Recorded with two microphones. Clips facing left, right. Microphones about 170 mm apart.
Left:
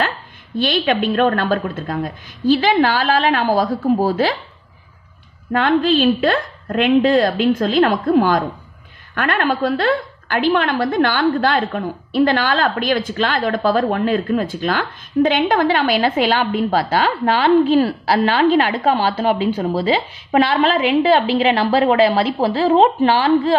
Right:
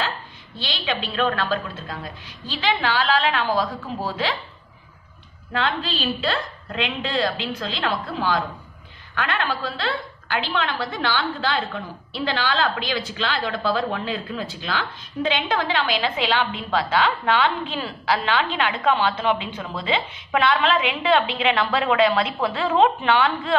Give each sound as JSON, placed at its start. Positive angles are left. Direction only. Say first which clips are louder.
{"t": 0.6, "sound": "a woman's voice", "louder": "left 11 dB", "side_deg": 50}
{"t": 5.5, "sound": "a woman's voice", "louder": "left 10 dB", "side_deg": 50}